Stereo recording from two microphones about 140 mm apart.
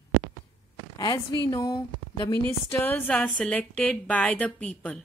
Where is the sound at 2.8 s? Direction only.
15° left (ahead or behind).